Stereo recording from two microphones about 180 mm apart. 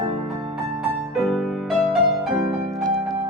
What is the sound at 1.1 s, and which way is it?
Music, centre (ahead or behind).